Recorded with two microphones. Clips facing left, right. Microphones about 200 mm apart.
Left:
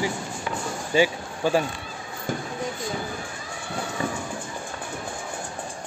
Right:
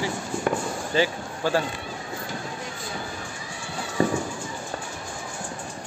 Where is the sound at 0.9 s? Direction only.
15° left (ahead or behind).